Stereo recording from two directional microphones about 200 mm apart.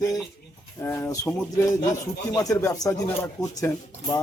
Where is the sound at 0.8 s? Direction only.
10° left (ahead or behind).